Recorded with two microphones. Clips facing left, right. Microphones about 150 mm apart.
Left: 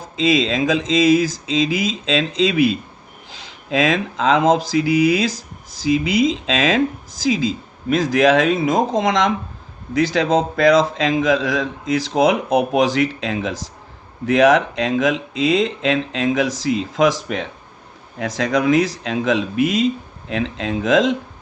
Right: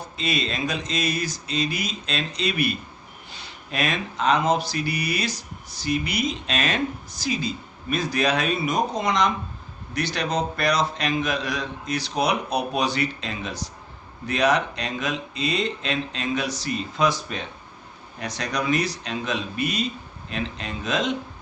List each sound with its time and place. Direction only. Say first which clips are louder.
0.0 s speech: left 10 dB; 90° left